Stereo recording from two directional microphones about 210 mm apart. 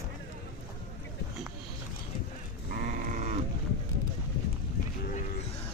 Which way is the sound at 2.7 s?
40° right (ahead or behind).